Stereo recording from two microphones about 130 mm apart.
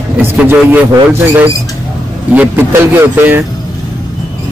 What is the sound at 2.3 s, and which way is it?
A man's voice, 15° right (ahead or behind).